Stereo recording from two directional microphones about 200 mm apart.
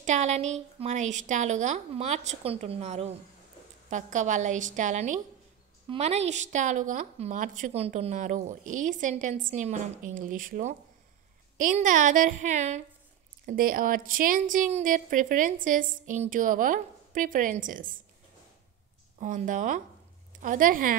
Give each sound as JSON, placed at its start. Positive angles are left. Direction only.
{"t": 0.0, "sound": "a woman's voice", "side_deg": -35}
{"t": 19.1, "sound": "a woman's voice", "side_deg": -40}